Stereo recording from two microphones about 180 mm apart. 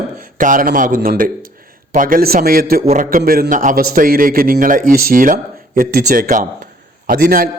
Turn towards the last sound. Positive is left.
turn(degrees=-55)  # may be behind; listen again after turning